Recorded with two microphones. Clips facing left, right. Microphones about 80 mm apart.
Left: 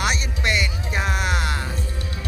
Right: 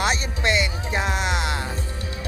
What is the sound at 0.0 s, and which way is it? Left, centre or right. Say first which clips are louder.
Music: right 1 dB; right.